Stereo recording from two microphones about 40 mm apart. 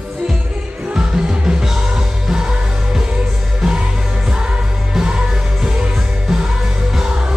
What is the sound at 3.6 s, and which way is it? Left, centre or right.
Music, centre.